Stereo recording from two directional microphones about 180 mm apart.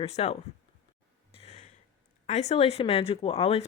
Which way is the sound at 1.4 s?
35° left (ahead or behind).